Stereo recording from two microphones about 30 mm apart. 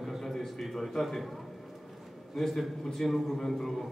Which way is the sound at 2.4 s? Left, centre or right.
Centre.